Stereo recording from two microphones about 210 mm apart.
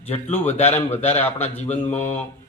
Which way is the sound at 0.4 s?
35° left (ahead or behind).